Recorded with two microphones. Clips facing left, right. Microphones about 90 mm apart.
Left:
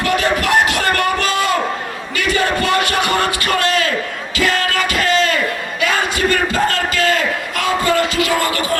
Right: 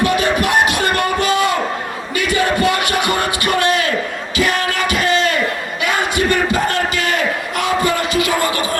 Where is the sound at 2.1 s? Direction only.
20° right (ahead or behind).